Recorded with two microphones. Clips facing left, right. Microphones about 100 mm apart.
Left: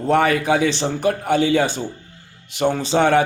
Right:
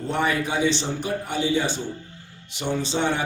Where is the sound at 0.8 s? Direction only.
65° left (ahead or behind).